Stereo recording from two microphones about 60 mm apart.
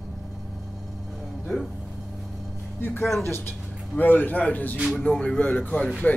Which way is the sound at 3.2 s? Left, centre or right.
Left.